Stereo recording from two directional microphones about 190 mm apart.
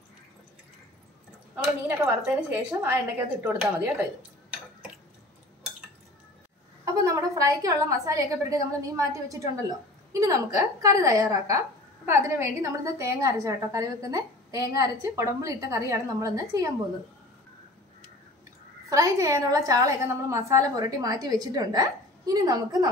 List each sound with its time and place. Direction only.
1.9 s a woman's voice: 10° right (ahead or behind)
6.8 s a woman's voice: 15° right (ahead or behind)
18.9 s a woman's voice: 15° right (ahead or behind)